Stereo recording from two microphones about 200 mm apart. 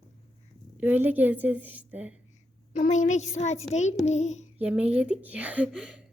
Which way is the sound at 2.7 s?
35° left (ahead or behind).